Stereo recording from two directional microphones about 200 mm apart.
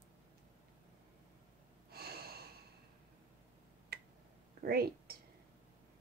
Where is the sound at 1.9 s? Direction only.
50° right (ahead or behind).